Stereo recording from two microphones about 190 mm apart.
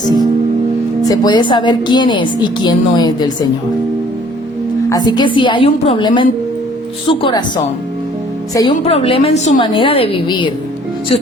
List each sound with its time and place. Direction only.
1.0 s a woman's voice: 20° left (ahead or behind)
4.9 s a woman's voice: 20° left (ahead or behind); by 9.6 s 35° left (ahead or behind)
9.6 s a woman's voice: 25° left (ahead or behind)